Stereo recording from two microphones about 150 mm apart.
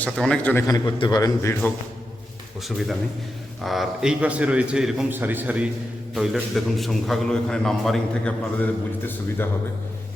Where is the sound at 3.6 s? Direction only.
Centre (ahead or behind).